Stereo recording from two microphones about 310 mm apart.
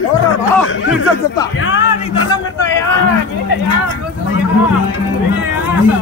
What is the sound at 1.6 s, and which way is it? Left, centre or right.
Music, left.